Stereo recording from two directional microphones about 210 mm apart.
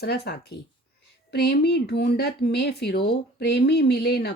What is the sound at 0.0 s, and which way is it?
Speech, 50° left (ahead or behind).